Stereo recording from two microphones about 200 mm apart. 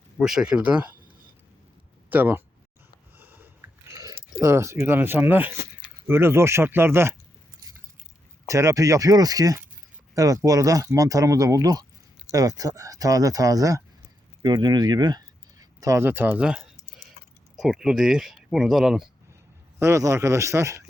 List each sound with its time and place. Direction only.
0.2 s speech: centre (ahead or behind)
2.0 s speech: 10° right (ahead or behind)
3.2 s a sound: 10° right (ahead or behind)
3.9 s speech: 15° right (ahead or behind)
8.4 s speech: 15° right (ahead or behind)
19.8 s speech: 15° right (ahead or behind)